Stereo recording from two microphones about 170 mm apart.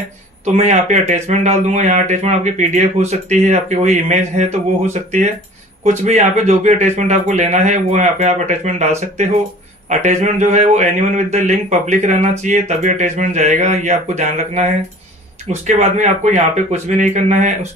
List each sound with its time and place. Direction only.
0.5 s speech: 40° right (ahead or behind)